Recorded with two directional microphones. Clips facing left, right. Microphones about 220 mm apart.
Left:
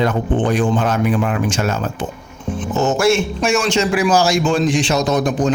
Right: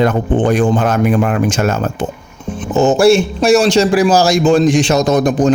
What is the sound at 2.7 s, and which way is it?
A man's voice, 30° right (ahead or behind).